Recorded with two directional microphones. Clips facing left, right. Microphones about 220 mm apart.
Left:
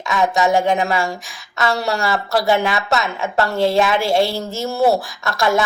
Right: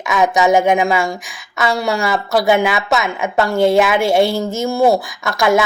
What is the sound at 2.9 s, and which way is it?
A woman's voice, 15° right (ahead or behind).